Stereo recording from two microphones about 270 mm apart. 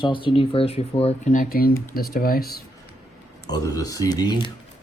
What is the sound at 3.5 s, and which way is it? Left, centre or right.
Speech, centre.